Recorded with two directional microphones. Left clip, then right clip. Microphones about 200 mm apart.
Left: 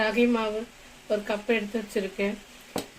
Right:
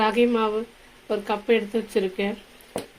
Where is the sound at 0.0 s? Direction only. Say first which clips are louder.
Right 4 dB; 40° right (ahead or behind).